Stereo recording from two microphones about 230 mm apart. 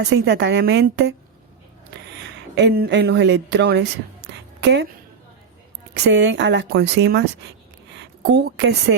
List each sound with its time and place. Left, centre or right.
0.0 s speech: right
5.9 s a woman's voice: right